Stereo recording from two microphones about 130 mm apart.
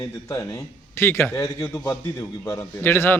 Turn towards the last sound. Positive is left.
turn(degrees=15)  # may be behind; listen again after turning